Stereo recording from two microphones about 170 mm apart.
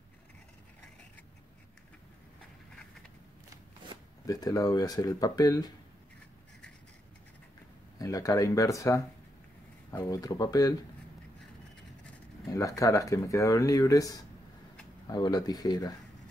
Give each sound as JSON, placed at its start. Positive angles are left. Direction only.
{"t": 4.3, "sound": "speech", "side_deg": 20}
{"t": 8.0, "sound": "speech", "side_deg": 20}
{"t": 12.4, "sound": "speech", "side_deg": 20}